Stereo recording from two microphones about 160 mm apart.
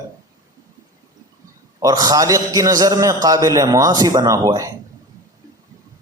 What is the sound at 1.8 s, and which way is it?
A man's voice, 25° right (ahead or behind).